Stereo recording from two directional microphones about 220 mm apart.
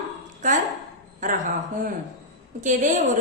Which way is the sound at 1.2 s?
35° right (ahead or behind).